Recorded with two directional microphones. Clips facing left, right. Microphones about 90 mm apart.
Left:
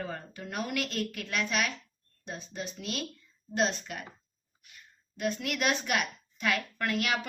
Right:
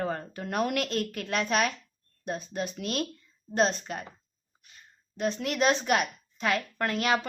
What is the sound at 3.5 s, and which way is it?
Speech, 35° right (ahead or behind).